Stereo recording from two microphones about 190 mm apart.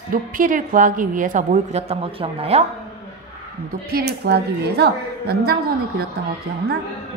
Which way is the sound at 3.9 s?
55° right (ahead or behind).